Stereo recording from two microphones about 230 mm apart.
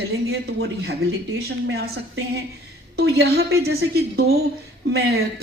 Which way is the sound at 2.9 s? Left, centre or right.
Right.